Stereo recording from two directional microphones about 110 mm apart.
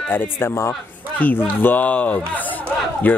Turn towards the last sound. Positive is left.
turn(degrees=15)  # may be behind; listen again after turning